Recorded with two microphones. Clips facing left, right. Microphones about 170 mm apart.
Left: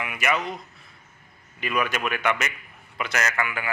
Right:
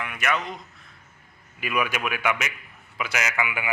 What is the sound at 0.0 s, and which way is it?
Speech, 5° left (ahead or behind).